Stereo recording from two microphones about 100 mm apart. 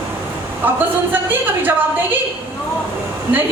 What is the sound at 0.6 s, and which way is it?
A woman's voice, 20° right (ahead or behind).